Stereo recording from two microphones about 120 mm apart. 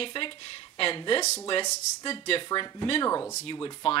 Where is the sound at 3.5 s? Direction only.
35° left (ahead or behind).